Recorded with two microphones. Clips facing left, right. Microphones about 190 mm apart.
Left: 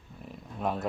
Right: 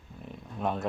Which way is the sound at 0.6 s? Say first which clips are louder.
Even; centre (ahead or behind).